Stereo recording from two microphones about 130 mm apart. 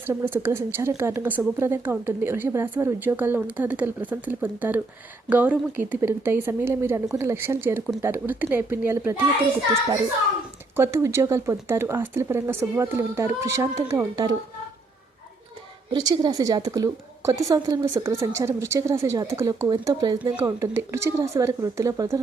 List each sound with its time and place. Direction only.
0.0 s a woman's voice: 20° right (ahead or behind)
10.8 s a woman's voice: 20° right (ahead or behind)
15.9 s a woman's voice: 35° right (ahead or behind)
20.3 s a woman's voice: 20° right (ahead or behind)